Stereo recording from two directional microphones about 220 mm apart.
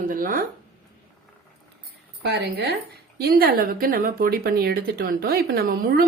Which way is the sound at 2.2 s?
50° right (ahead or behind).